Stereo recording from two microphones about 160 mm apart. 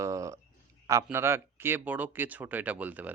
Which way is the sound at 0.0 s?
20° right (ahead or behind).